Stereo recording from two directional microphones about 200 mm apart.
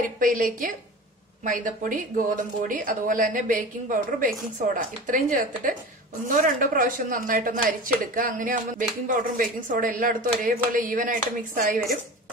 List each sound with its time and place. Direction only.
0.2 s a woman's voice: 45° right (ahead or behind)